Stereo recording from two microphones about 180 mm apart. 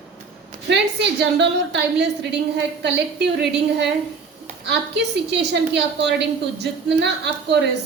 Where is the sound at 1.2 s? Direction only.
75° right (ahead or behind).